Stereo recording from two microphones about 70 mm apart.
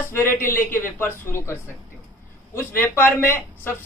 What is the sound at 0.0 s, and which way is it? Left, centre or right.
Speech, left.